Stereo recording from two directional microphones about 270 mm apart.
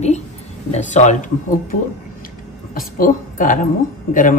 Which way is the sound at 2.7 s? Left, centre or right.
Left.